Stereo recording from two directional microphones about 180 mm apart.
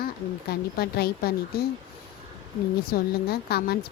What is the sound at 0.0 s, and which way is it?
Speech, 60° left (ahead or behind).